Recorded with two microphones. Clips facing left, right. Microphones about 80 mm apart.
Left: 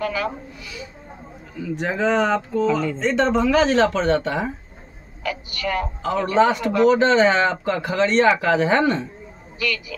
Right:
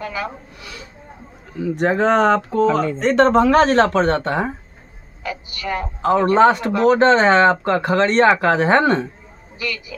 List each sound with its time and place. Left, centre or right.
0.0 s speech: right
1.6 s speech: right
5.2 s a woman's voice: right
6.0 s speech: right
9.6 s speech: right